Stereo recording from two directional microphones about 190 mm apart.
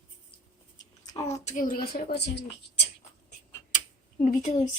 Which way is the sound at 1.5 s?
45° left (ahead or behind).